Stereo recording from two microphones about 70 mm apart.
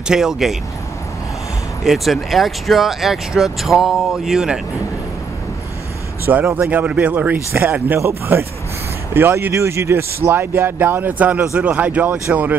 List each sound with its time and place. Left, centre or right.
0.1 s speech: centre
1.9 s speech: centre
6.3 s speech: right
9.1 s speech: right